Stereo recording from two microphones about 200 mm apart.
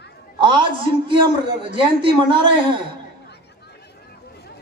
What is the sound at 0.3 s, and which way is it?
A woman's voice, 25° right (ahead or behind).